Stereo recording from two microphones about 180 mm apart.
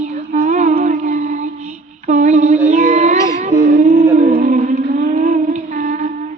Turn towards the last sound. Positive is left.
turn(degrees=-45)  # may be behind; listen again after turning